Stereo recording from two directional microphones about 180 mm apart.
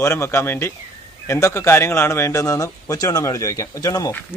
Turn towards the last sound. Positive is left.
turn(degrees=15)  # may be behind; listen again after turning